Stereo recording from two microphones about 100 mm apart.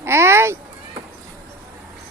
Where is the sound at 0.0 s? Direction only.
25° right (ahead or behind).